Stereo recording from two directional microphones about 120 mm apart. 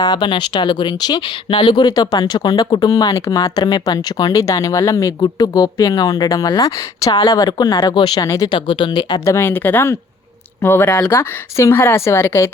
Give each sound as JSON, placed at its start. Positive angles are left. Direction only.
{"t": 0.0, "sound": "speech", "side_deg": 35}
{"t": 8.5, "sound": "speech", "side_deg": 45}
{"t": 9.2, "sound": "a woman's voice", "side_deg": 20}